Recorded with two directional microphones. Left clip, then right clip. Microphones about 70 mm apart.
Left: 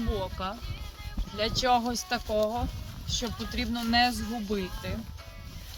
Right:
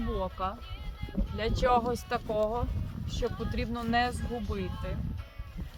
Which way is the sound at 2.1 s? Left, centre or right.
Right.